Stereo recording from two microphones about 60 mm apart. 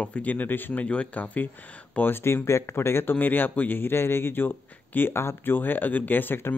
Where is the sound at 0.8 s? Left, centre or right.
Left.